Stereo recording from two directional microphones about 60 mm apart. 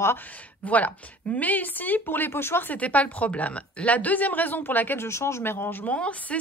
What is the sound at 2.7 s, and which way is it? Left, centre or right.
Speech, left.